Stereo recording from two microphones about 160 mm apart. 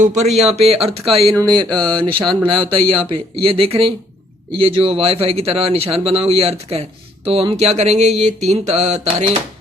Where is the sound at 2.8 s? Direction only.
35° right (ahead or behind).